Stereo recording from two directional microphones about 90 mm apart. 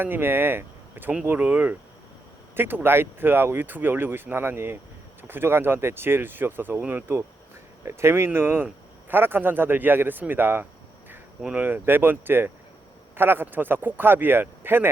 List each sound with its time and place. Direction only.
0.0 s a man's voice: 25° right (ahead or behind)